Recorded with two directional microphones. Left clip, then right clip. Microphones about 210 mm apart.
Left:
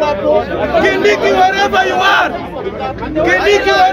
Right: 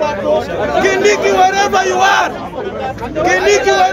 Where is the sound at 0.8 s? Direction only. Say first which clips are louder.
Right 1 dB; centre (ahead or behind).